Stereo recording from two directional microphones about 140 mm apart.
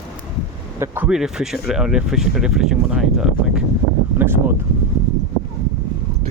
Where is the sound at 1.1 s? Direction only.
5° right (ahead or behind).